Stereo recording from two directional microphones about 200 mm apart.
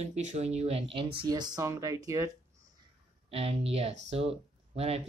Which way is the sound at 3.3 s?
30° right (ahead or behind).